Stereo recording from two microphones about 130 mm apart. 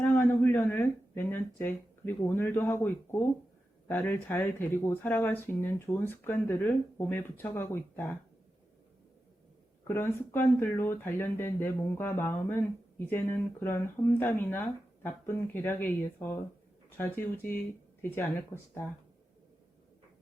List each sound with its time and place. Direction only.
0.0 s speech: 15° left (ahead or behind)
9.8 s speech: 20° left (ahead or behind)